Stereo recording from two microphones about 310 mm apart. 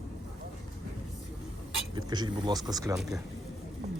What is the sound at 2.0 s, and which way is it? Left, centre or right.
Speech, centre.